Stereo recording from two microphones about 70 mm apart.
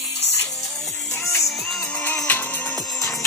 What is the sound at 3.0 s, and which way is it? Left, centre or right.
Music, left.